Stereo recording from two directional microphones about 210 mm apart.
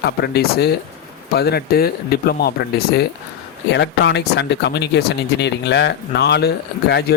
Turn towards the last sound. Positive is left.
turn(degrees=50)  # may be behind; listen again after turning